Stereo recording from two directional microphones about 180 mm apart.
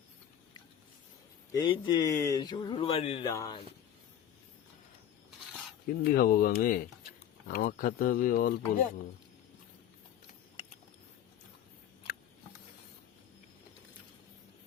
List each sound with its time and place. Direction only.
1.5 s speech: 25° left (ahead or behind)
3.3 s speech: 20° left (ahead or behind)
6.0 s speech: 55° left (ahead or behind)